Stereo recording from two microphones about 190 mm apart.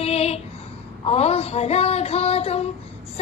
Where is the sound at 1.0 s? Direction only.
30° left (ahead or behind).